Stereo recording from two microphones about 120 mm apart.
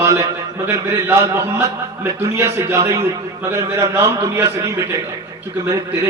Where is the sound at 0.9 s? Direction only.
20° right (ahead or behind).